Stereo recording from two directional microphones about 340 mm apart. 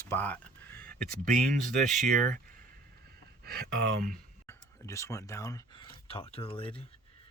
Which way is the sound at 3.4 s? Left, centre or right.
Right.